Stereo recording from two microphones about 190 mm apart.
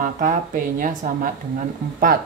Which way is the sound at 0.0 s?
45° right (ahead or behind).